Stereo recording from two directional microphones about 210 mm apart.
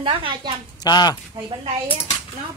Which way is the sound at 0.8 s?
20° left (ahead or behind).